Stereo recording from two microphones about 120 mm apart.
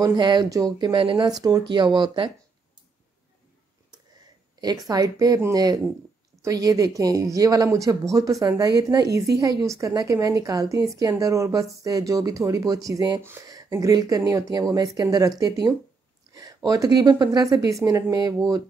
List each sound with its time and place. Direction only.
0.0 s speech: 40° right (ahead or behind)
4.6 s a woman's voice: 35° right (ahead or behind)